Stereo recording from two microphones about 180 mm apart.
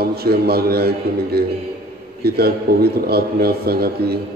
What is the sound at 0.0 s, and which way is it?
A man's voice, 60° right (ahead or behind).